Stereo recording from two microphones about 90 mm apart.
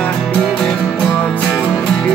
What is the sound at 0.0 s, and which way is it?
Music, 5° left (ahead or behind).